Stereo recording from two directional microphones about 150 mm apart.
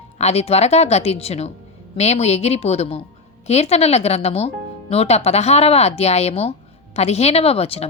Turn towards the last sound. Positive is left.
turn(degrees=40)  # may be behind; listen again after turning